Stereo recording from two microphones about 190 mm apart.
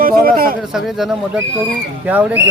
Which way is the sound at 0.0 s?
50° right (ahead or behind).